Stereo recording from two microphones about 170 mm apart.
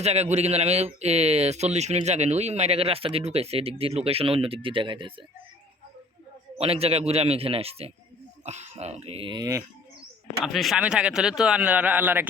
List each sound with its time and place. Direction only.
0.0 s speech: 40° right (ahead or behind)
6.6 s speech: 35° right (ahead or behind); by 9.6 s 20° right (ahead or behind)
10.4 s speech: centre (ahead or behind)